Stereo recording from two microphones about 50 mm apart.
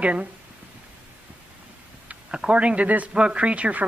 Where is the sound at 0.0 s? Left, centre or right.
Right.